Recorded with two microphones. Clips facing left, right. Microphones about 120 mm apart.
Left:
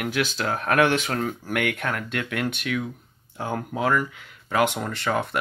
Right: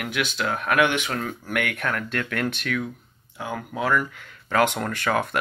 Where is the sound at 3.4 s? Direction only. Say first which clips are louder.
Left 2 dB; 45° left (ahead or behind).